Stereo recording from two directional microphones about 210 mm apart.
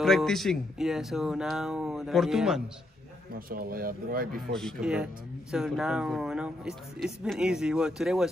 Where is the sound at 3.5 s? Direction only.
45° right (ahead or behind).